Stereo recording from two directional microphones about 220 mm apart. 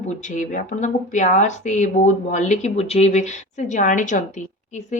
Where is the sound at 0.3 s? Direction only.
35° left (ahead or behind).